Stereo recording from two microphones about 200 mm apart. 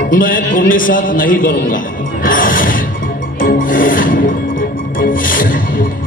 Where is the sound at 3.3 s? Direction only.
45° left (ahead or behind).